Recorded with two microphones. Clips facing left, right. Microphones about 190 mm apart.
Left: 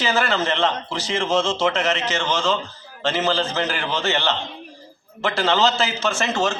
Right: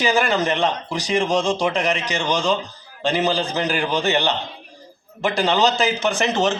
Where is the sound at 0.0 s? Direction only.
15° right (ahead or behind).